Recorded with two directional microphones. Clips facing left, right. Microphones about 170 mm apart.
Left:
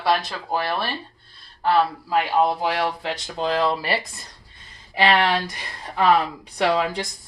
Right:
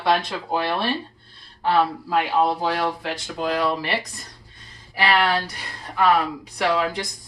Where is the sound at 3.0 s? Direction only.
25° left (ahead or behind).